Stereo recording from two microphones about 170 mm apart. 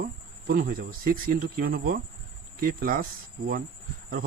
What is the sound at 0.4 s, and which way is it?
Speech, 60° right (ahead or behind).